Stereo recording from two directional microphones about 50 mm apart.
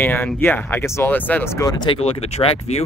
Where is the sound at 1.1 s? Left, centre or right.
Left.